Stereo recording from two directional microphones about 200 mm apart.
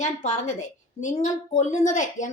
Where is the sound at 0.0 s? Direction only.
35° left (ahead or behind).